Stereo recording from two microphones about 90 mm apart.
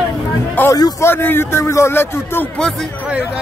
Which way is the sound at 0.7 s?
35° left (ahead or behind).